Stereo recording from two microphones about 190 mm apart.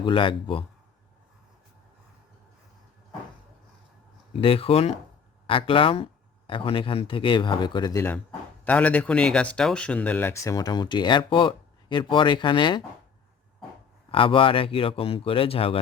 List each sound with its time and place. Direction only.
0.0 s speech: 25° left (ahead or behind)
4.4 s speech: 30° left (ahead or behind)
14.1 s speech: 25° left (ahead or behind)